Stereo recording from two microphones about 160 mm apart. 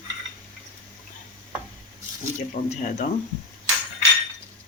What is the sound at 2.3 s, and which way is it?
Speech, 55° left (ahead or behind).